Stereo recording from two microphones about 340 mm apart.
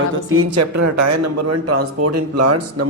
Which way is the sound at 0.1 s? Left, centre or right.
Right.